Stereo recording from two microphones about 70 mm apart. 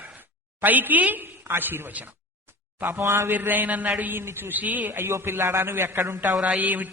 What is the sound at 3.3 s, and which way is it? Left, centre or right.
A man's voice, right.